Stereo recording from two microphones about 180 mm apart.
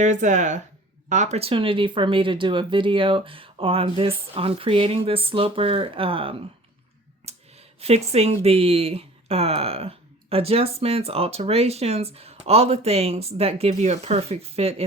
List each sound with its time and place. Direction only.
0.0 s speech: 40° right (ahead or behind)
7.3 s a sound: 35° right (ahead or behind)
7.8 s speech: 35° right (ahead or behind)